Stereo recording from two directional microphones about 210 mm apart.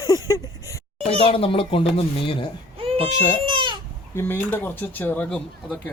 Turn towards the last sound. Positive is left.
turn(degrees=5)  # may be behind; listen again after turning